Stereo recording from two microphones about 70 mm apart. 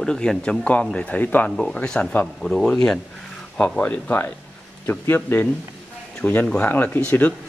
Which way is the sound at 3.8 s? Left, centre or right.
Left.